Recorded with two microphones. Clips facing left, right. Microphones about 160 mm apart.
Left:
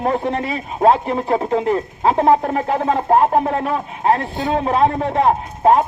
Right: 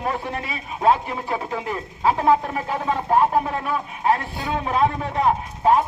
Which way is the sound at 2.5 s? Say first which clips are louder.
Left 6 dB; 45° left (ahead or behind).